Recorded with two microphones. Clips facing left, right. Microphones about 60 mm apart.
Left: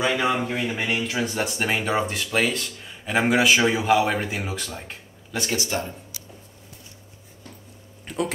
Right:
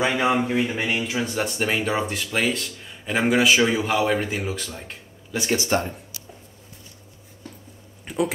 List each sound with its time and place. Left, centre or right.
0.0 s a man's voice: centre
0.4 s speech: centre
5.7 s speech: right
8.1 s a sound: centre